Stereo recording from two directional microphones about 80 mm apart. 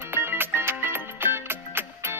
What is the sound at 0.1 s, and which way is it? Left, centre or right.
Music, right.